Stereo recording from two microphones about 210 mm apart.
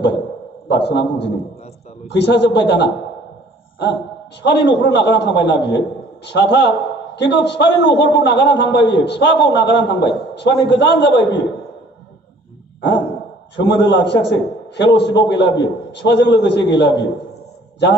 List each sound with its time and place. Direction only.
0.7 s a man's voice: 55° left (ahead or behind)
4.4 s a man's voice: 55° left (ahead or behind)
13.6 s a man's voice: 55° left (ahead or behind)